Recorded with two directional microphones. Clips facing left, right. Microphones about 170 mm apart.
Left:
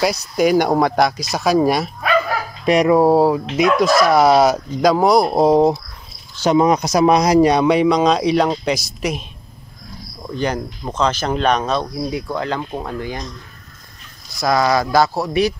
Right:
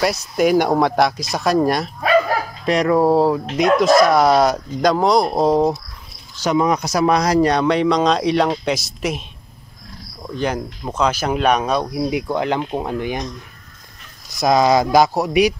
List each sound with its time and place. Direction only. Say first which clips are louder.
0.0 s speech: left 1 dB; centre (ahead or behind)
10.2 s speech: left 1 dB; centre (ahead or behind); by 13.2 s 20° right (ahead or behind)
14.3 s speech: right 2 dB; 20° right (ahead or behind)